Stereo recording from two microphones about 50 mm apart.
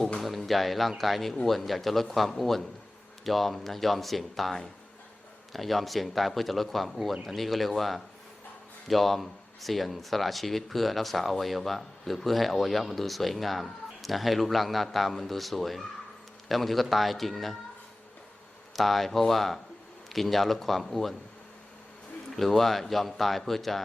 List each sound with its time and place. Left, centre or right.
0.2 s speech: centre
18.8 s speech: centre
22.3 s speech: centre